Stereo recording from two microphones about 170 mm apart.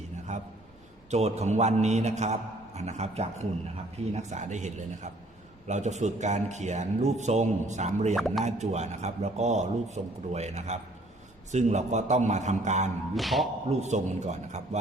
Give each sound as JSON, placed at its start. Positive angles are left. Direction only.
{"t": 0.3, "sound": "a man's voice", "side_deg": -40}
{"t": 8.1, "sound": "speech", "side_deg": 0}
{"t": 8.4, "sound": "a man's voice", "side_deg": -40}
{"t": 13.1, "sound": "speech", "side_deg": 0}
{"t": 13.7, "sound": "a man's voice", "side_deg": -40}